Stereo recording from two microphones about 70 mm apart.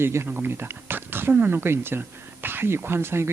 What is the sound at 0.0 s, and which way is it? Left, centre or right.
Speech, right.